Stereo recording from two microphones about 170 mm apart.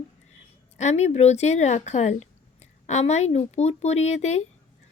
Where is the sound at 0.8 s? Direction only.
40° left (ahead or behind).